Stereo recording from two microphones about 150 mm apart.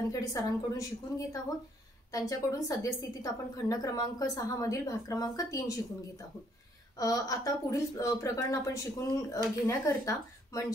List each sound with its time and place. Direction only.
0.1 s speech: 20° left (ahead or behind)
7.0 s speech: 25° left (ahead or behind)